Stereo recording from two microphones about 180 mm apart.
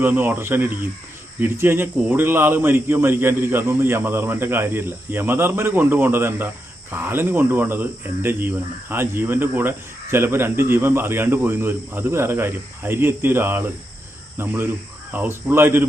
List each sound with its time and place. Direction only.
0.0 s speech: 10° right (ahead or behind)